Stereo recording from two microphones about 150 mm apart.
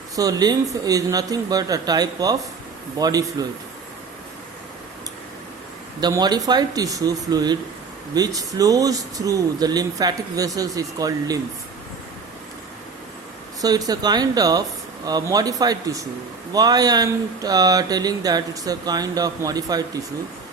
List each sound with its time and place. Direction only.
0.2 s speech: 25° right (ahead or behind)
6.0 s speech: 25° right (ahead or behind)
13.6 s speech: 25° right (ahead or behind)